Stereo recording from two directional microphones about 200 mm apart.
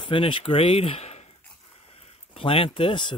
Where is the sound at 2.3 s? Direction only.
25° left (ahead or behind).